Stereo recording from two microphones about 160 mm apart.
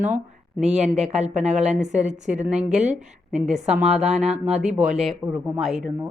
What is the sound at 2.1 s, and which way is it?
A woman's voice, 10° right (ahead or behind).